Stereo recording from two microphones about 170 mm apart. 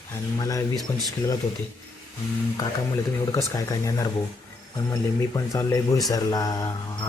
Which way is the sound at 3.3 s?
20° left (ahead or behind).